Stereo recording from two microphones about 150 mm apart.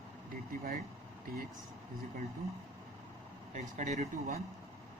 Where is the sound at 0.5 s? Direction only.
70° right (ahead or behind).